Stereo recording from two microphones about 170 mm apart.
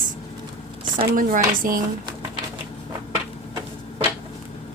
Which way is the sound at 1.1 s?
55° right (ahead or behind).